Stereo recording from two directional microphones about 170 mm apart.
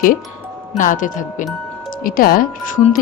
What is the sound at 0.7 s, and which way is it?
Speech, 50° left (ahead or behind).